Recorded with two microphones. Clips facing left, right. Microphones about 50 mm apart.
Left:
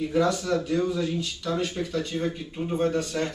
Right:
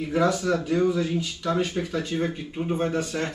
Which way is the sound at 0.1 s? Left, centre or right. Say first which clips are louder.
Right 3 dB; centre.